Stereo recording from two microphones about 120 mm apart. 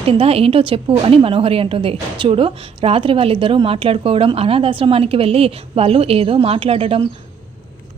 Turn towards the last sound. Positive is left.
turn(degrees=-55)  # may be behind; listen again after turning